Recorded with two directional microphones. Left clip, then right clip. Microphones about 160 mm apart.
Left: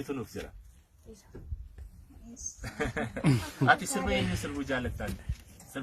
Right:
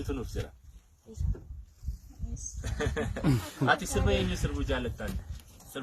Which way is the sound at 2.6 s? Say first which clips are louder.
Even; 20° right (ahead or behind).